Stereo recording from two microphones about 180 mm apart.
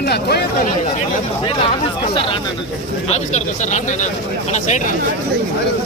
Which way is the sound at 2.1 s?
30° left (ahead or behind).